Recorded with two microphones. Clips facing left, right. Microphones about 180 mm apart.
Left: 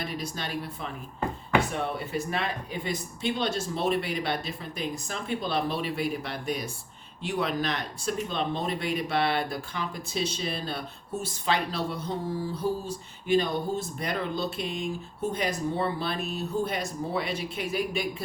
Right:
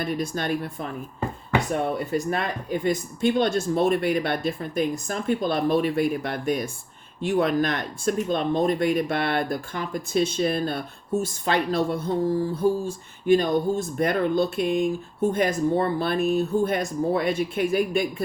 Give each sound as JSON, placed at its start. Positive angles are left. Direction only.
{"t": 0.0, "sound": "speech", "side_deg": -50}